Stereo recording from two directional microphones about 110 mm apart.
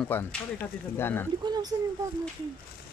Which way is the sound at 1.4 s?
40° right (ahead or behind).